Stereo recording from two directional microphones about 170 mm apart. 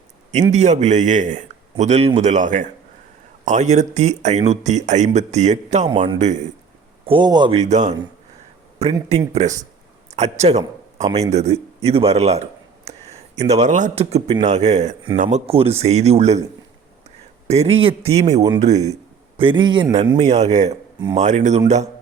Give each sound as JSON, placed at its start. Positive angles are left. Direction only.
{"t": 0.5, "sound": "speech", "side_deg": -40}
{"t": 7.0, "sound": "speech", "side_deg": -30}
{"t": 7.6, "sound": "speech", "side_deg": -45}
{"t": 17.5, "sound": "speech", "side_deg": -35}
{"t": 19.4, "sound": "speech", "side_deg": -30}
{"t": 20.1, "sound": "speech", "side_deg": -40}